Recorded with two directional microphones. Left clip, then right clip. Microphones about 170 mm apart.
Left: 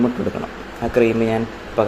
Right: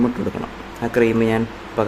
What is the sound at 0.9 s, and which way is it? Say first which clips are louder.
Speech: even; 15° right (ahead or behind).